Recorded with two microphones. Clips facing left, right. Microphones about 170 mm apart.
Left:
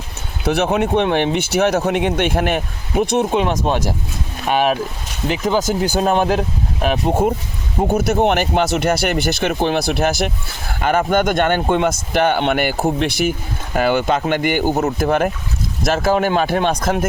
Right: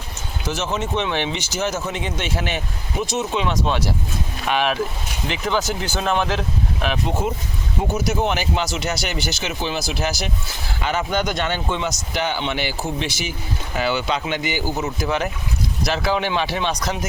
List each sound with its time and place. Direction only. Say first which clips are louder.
0.4 s speech: left 8 dB; 60° left (ahead or behind); by 7.2 s 40° left (ahead or behind)
7.9 s speech: left 6 dB; 55° left (ahead or behind)